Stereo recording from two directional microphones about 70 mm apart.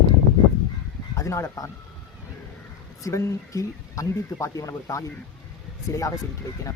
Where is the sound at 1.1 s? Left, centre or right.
Left.